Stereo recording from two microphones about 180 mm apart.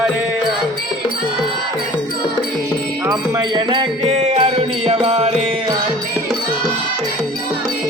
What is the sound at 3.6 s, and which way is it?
Music, 25° right (ahead or behind).